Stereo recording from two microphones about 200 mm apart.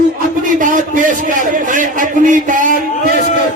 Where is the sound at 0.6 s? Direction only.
40° right (ahead or behind).